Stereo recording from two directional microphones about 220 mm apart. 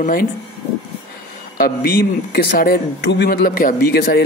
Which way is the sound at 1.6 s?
45° left (ahead or behind).